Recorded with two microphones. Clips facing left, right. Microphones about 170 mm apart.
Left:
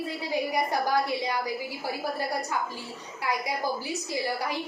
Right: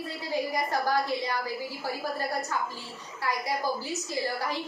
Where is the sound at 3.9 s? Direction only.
15° left (ahead or behind).